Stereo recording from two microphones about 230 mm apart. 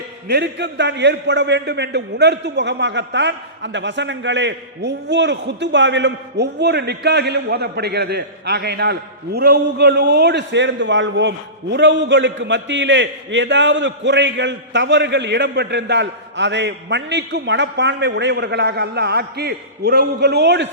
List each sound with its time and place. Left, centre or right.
0.3 s a man's voice: right